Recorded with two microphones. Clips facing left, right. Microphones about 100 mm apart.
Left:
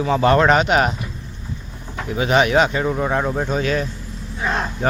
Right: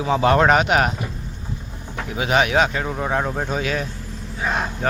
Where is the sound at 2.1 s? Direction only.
5° right (ahead or behind).